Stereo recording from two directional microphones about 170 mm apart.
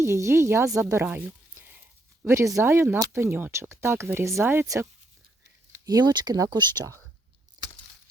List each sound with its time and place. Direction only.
0.0 s speech: 15° right (ahead or behind)
7.6 s crack: 25° right (ahead or behind)